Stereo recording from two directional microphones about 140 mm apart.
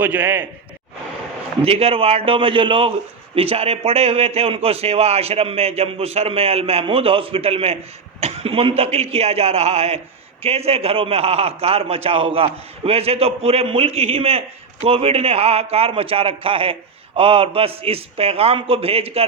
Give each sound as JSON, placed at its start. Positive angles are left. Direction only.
{"t": 0.0, "sound": "a man's voice", "side_deg": -15}
{"t": 1.6, "sound": "a man's voice", "side_deg": -45}